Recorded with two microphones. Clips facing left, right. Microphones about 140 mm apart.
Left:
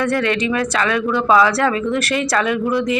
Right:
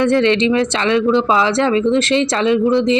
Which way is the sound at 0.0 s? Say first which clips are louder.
Right 5 dB; 25° right (ahead or behind).